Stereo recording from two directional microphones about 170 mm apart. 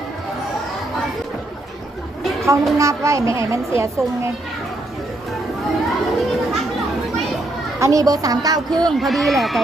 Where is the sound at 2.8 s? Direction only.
20° right (ahead or behind).